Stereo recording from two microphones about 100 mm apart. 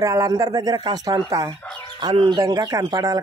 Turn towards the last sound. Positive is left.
turn(degrees=-40)  # may be behind; listen again after turning